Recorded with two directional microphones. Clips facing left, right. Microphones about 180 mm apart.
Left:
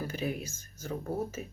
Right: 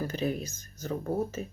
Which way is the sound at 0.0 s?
10° left (ahead or behind).